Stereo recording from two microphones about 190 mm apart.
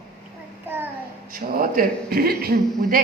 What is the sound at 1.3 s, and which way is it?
A man's voice, 50° right (ahead or behind).